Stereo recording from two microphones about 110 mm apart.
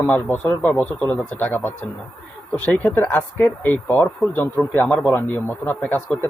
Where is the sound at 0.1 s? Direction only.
15° left (ahead or behind).